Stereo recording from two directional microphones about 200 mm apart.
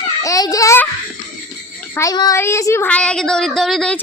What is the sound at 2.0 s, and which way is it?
A woman's voice, 20° left (ahead or behind).